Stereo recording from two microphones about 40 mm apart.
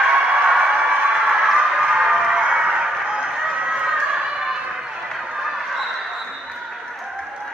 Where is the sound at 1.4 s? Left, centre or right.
Centre.